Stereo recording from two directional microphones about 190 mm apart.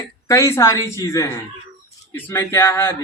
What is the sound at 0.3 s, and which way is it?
Speech, 15° left (ahead or behind).